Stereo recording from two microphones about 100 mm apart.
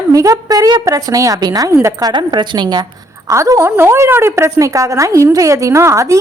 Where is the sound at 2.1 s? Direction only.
50° right (ahead or behind).